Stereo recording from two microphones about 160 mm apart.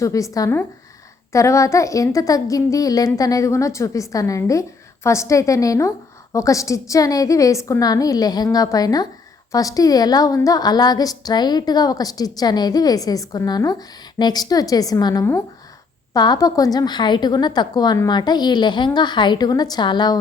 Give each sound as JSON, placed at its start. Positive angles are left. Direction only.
{"t": 0.0, "sound": "a woman's voice", "side_deg": 20}